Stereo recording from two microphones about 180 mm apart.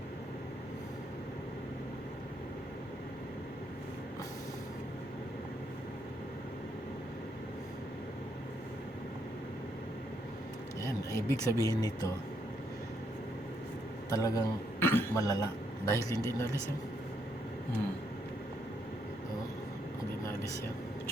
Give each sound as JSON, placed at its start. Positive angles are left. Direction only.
{"t": 10.8, "sound": "speech", "side_deg": 15}
{"t": 14.1, "sound": "a man's voice", "side_deg": 20}